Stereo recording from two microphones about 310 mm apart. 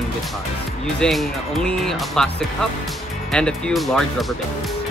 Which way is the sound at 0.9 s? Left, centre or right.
Centre.